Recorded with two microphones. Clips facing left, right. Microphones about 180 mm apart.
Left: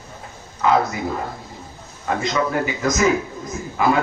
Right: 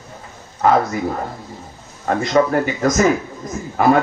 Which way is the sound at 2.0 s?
50° right (ahead or behind).